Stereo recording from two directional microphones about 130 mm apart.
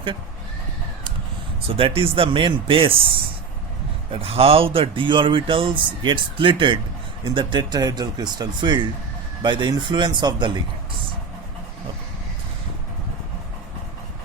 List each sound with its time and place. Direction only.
1.6 s speech: 45° right (ahead or behind)